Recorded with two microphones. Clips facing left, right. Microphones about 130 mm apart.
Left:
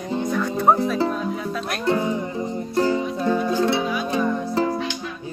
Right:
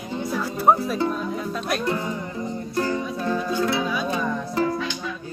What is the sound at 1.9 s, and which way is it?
Music, 20° left (ahead or behind).